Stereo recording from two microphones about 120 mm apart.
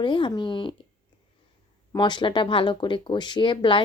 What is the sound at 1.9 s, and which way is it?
Speech, 40° left (ahead or behind).